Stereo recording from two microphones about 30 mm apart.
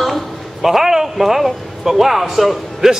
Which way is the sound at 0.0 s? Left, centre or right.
Centre.